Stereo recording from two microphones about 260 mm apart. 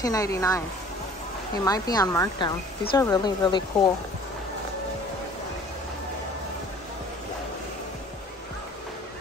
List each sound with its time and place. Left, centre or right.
0.0 s speech: centre
1.6 s speech: centre